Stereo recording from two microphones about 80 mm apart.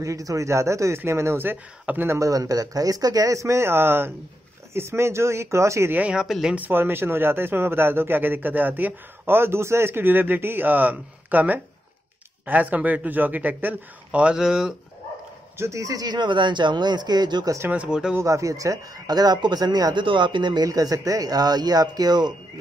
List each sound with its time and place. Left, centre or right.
0.0 s speech: right
2.1 s speech: right
5.9 s speech: centre
6.2 s speech: centre
6.5 s a man's voice: right; by 14.7 s centre
15.5 s speech: right
17.6 s speech: centre
18.2 s speech: right
20.6 s speech: right